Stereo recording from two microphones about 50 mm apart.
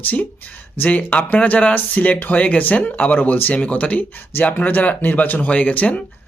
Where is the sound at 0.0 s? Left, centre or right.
Left.